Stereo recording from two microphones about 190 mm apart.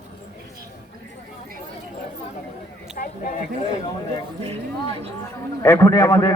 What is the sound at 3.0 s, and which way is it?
Speech, 45° left (ahead or behind).